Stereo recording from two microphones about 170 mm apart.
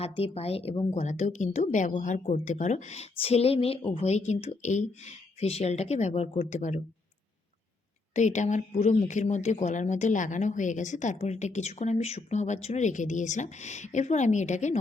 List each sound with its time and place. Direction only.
0.0 s a woman's voice: 35° left (ahead or behind)
8.1 s speech: 45° left (ahead or behind)